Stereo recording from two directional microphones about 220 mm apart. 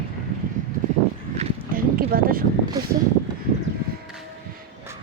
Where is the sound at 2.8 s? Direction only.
15° right (ahead or behind).